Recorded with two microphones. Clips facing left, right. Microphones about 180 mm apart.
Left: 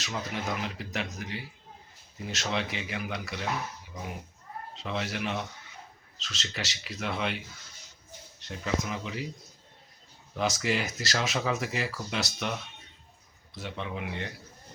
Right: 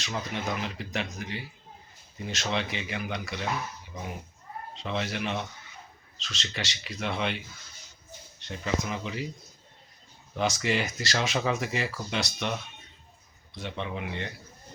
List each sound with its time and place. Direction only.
0.0 s speech: 5° left (ahead or behind)
4.7 s speech: 5° left (ahead or behind)
10.3 s speech: centre (ahead or behind)